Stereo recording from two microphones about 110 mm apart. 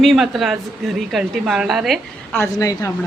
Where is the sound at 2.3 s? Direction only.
25° left (ahead or behind).